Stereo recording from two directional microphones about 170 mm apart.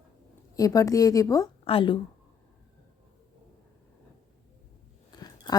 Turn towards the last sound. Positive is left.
turn(degrees=25)  # may be behind; listen again after turning